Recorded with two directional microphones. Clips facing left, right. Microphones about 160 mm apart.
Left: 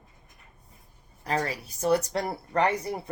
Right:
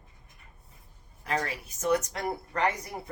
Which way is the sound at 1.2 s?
35° left (ahead or behind).